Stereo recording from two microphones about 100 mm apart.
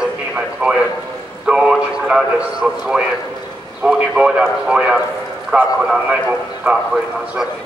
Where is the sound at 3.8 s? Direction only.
10° right (ahead or behind).